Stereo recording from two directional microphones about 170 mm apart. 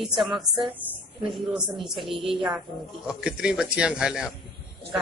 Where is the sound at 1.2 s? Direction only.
Centre (ahead or behind).